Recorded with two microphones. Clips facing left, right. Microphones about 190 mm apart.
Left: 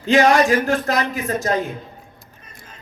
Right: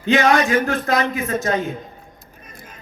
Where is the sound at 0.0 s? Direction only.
35° left (ahead or behind).